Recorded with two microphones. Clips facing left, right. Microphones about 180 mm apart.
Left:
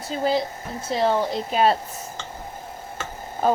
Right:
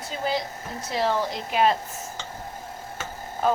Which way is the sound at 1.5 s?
35° left (ahead or behind).